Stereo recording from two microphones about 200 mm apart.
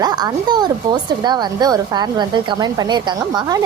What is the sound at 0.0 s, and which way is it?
A woman's voice, 20° right (ahead or behind).